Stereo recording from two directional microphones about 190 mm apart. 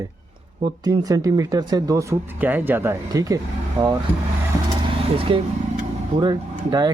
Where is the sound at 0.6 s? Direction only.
20° right (ahead or behind).